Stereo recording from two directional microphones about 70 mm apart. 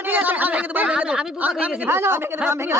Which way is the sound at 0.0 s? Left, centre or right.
Right.